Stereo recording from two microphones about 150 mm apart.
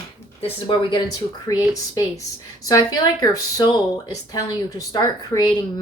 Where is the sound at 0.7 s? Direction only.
35° left (ahead or behind).